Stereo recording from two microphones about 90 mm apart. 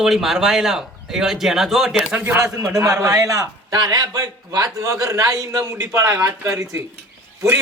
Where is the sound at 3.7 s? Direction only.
50° right (ahead or behind).